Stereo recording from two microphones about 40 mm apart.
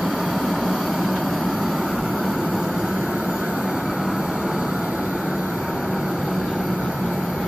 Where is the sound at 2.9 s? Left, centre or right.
Centre.